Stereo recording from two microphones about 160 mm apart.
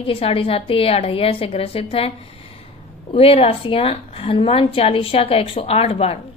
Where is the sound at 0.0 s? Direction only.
35° left (ahead or behind).